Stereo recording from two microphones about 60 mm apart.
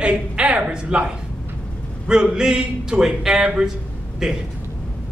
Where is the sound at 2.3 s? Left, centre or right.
Centre.